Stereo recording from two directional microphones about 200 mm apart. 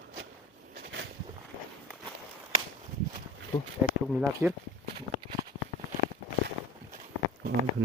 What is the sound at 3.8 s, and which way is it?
Speech, 10° right (ahead or behind).